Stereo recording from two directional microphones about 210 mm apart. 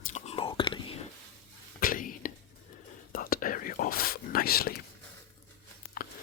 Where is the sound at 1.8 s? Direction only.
40° left (ahead or behind).